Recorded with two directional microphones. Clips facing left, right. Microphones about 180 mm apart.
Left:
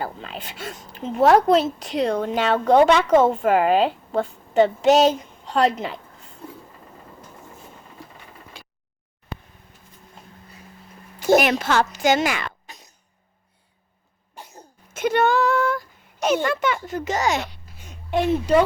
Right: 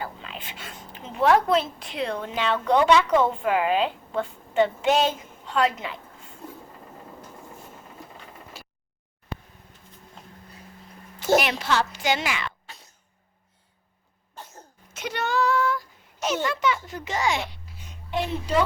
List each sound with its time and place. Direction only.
0.0 s a woman's voice: 40° left (ahead or behind)
8.6 s a sound: 5° right (ahead or behind)
11.3 s a woman's voice: 50° left (ahead or behind)
12.6 s cough: 15° left (ahead or behind)
14.3 s cough: 15° left (ahead or behind)
14.9 s a sound: 50° left (ahead or behind)